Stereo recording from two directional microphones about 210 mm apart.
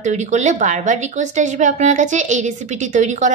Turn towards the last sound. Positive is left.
turn(degrees=-35)  # may be behind; listen again after turning